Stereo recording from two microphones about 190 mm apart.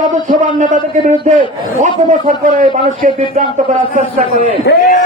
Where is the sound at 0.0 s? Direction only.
40° right (ahead or behind).